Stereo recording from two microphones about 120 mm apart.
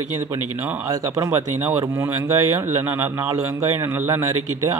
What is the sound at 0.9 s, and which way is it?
Speech, 30° right (ahead or behind).